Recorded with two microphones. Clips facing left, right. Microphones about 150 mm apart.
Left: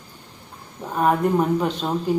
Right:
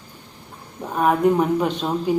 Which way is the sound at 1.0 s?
5° right (ahead or behind).